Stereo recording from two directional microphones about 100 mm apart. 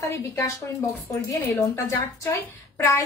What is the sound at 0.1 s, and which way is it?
Speech, 30° left (ahead or behind).